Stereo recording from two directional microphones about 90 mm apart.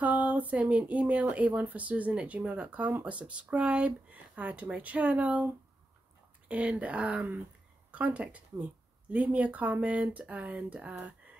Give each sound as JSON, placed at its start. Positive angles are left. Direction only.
{"t": 0.0, "sound": "speech", "side_deg": -15}
{"t": 6.5, "sound": "speech", "side_deg": -15}